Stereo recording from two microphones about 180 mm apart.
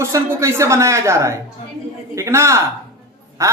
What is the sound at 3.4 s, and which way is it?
Quack, 15° right (ahead or behind).